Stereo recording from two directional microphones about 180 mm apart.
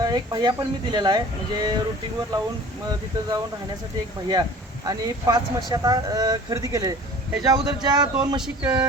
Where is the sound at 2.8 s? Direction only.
20° right (ahead or behind).